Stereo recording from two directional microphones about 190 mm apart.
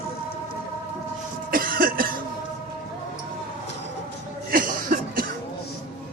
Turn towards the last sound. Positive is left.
turn(degrees=-50)  # may be behind; listen again after turning